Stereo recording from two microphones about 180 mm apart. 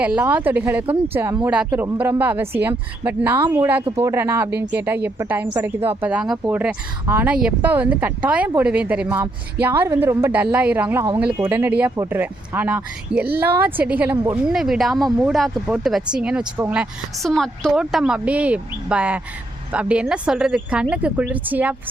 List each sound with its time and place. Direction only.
0.0 s speech: 10° right (ahead or behind)
9.0 s speech: 20° right (ahead or behind)
17.2 s speech: centre (ahead or behind)